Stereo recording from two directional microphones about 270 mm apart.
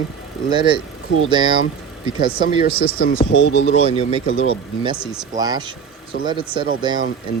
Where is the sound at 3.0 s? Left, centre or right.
Left.